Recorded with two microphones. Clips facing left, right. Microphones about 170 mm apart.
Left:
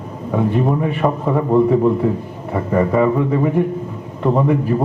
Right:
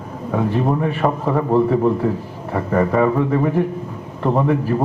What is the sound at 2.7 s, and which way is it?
A man's voice, 5° left (ahead or behind).